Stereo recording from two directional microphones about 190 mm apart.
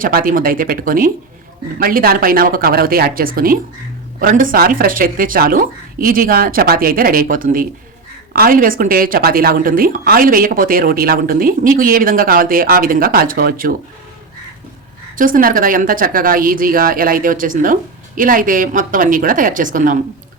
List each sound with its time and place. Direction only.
0.0 s a woman's voice: 50° right (ahead or behind)
15.1 s a woman's voice: 45° right (ahead or behind)